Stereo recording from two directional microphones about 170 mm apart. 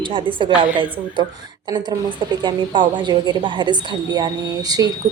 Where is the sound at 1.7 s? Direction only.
25° right (ahead or behind).